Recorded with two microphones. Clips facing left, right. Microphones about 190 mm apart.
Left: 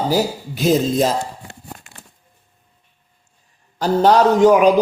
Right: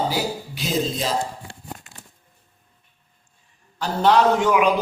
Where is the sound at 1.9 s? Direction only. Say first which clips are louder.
Left 2 dB; 75° left (ahead or behind).